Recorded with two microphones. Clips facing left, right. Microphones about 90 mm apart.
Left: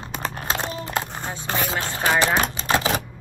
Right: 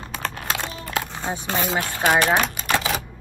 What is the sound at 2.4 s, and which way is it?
Typewriter, 25° left (ahead or behind).